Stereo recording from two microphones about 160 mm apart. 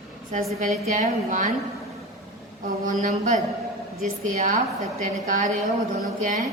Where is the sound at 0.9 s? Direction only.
50° right (ahead or behind).